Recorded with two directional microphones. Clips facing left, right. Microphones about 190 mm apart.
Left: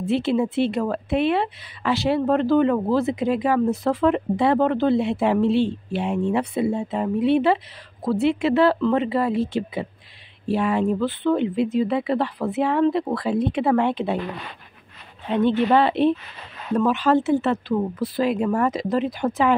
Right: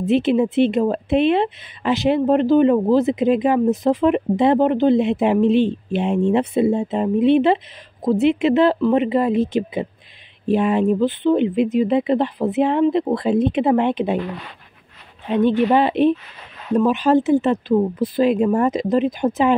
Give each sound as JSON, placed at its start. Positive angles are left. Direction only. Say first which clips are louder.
{"t": 0.0, "sound": "speech", "louder": "right 4 dB", "side_deg": -20}
{"t": 15.2, "sound": "speech", "louder": "right 3 dB", "side_deg": -15}